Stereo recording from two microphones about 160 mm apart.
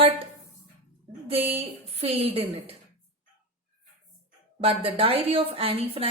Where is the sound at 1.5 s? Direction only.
40° right (ahead or behind).